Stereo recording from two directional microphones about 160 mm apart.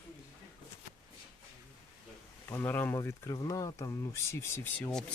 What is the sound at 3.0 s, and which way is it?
Speech, 20° left (ahead or behind).